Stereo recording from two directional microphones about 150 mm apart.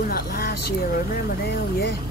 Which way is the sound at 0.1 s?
90° left.